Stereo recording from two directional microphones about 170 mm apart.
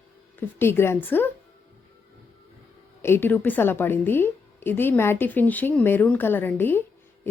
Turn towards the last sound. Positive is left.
turn(degrees=10)  # may be behind; listen again after turning